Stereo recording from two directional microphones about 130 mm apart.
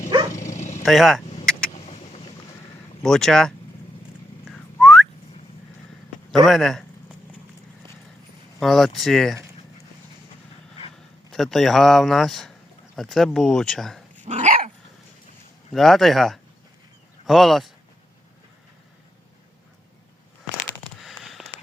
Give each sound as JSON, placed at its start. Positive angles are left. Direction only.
{"t": 0.5, "sound": "a sound", "side_deg": 65}
{"t": 0.9, "sound": "speech", "side_deg": 0}
{"t": 1.9, "sound": "vehicle", "side_deg": 50}
{"t": 3.0, "sound": "speech", "side_deg": 5}
{"t": 4.5, "sound": "whistling", "side_deg": 0}
{"t": 6.4, "sound": "speech", "side_deg": 0}
{"t": 8.5, "sound": "speech", "side_deg": 0}
{"t": 11.3, "sound": "speech", "side_deg": 0}
{"t": 14.3, "sound": "dog", "side_deg": -65}
{"t": 15.7, "sound": "speech", "side_deg": 0}
{"t": 21.0, "sound": "fireworks", "side_deg": 0}